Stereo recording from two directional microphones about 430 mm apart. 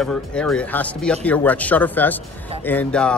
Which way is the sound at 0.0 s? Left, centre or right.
Centre.